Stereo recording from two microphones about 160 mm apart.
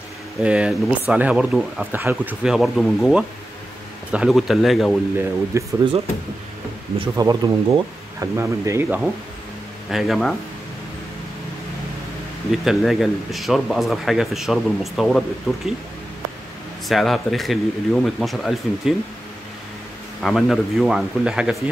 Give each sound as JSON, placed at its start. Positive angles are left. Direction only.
{"t": 0.4, "sound": "speech", "side_deg": -5}
{"t": 2.4, "sound": "speech", "side_deg": 0}
{"t": 5.5, "sound": "speech", "side_deg": -20}
{"t": 7.2, "sound": "speech", "side_deg": -25}
{"t": 9.8, "sound": "speech", "side_deg": 0}
{"t": 12.4, "sound": "speech", "side_deg": 0}
{"t": 16.8, "sound": "speech", "side_deg": 0}
{"t": 20.2, "sound": "speech", "side_deg": 0}